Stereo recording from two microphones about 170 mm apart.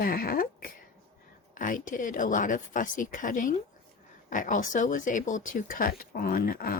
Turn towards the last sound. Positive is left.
turn(degrees=60)  # may be behind; listen again after turning